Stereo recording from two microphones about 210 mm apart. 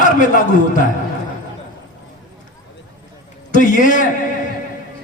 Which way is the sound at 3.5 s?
40° left (ahead or behind).